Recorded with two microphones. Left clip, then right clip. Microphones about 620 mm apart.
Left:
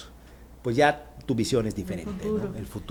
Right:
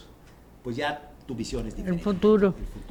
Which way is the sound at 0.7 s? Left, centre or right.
Left.